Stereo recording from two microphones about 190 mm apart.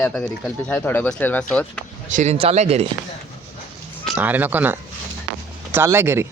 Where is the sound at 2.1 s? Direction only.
40° right (ahead or behind).